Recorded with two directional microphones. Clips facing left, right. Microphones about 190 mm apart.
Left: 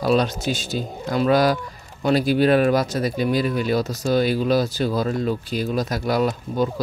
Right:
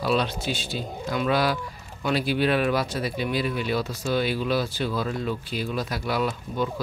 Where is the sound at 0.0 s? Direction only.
45° left (ahead or behind).